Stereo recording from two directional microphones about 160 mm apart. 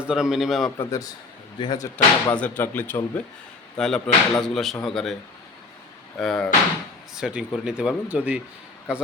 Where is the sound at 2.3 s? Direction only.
10° left (ahead or behind).